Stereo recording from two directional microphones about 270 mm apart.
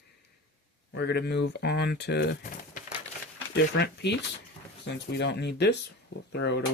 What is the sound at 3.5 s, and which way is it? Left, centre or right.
Speech, left.